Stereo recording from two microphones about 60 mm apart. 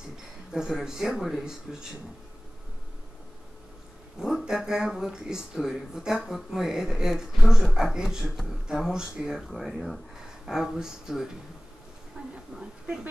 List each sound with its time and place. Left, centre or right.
0.5 s speech: centre
4.5 s speech: centre
12.2 s a sound: centre
12.5 s speech: centre